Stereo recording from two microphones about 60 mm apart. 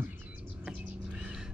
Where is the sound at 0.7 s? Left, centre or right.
Centre.